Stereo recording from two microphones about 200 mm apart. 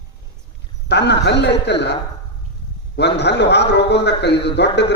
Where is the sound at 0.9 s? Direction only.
60° left (ahead or behind).